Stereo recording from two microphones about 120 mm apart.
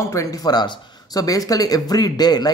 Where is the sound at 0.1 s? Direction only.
25° left (ahead or behind).